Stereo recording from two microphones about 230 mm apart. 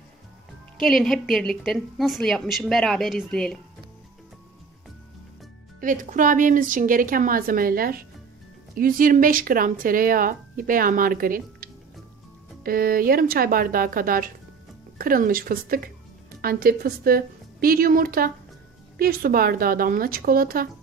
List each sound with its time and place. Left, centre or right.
0.7 s speech: centre
5.8 s a woman's voice: right